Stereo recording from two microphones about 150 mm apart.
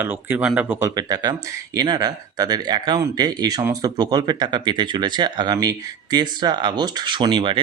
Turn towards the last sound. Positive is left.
turn(degrees=-35)  # may be behind; listen again after turning